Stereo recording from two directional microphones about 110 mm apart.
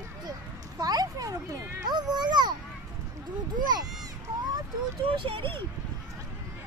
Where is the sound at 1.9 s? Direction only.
40° right (ahead or behind).